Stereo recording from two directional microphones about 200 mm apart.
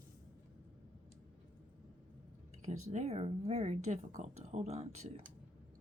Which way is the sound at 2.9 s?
35° right (ahead or behind).